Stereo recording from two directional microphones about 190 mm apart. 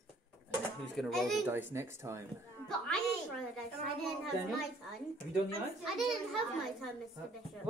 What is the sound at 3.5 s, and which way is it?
Speech, centre (ahead or behind).